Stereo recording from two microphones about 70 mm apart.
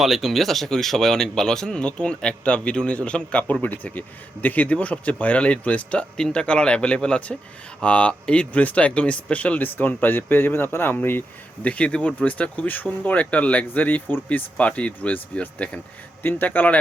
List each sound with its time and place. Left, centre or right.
0.0 s speech: centre; by 11.2 s left
11.6 s speech: centre